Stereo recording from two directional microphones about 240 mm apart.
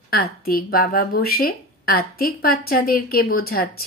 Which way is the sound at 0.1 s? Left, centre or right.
Left.